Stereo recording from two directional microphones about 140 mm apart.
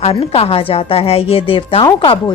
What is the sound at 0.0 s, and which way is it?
A woman's voice, 45° left (ahead or behind).